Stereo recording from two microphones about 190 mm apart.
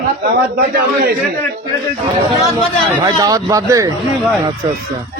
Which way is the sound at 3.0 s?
20° right (ahead or behind).